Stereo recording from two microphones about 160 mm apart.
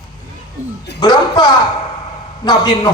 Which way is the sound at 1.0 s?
30° left (ahead or behind).